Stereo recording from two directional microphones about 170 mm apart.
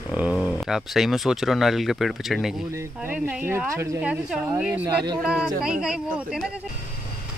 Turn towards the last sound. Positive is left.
turn(degrees=-5)  # may be behind; listen again after turning